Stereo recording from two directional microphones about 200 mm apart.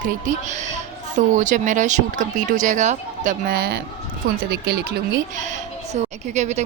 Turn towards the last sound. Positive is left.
turn(degrees=-35)  # may be behind; listen again after turning